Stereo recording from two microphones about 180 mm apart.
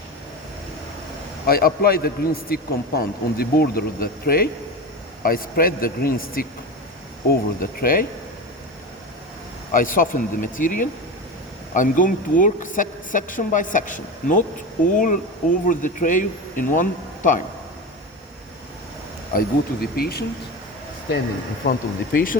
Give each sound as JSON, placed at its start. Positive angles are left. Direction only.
{"t": 1.5, "sound": "a man's voice", "side_deg": 55}
{"t": 9.7, "sound": "speech", "side_deg": 50}
{"t": 19.3, "sound": "a man's voice", "side_deg": 55}
{"t": 21.6, "sound": "speech", "side_deg": 50}